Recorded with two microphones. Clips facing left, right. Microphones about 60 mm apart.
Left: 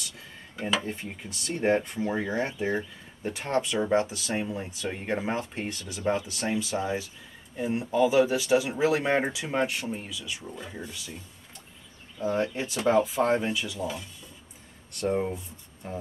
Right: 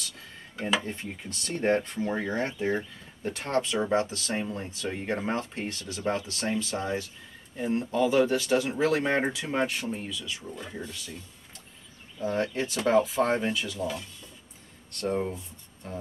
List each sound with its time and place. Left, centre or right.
0.6 s speech: centre
12.2 s speech: centre